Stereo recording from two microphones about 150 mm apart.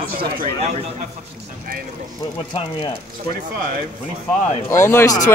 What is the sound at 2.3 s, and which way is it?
Speech, 35° left (ahead or behind).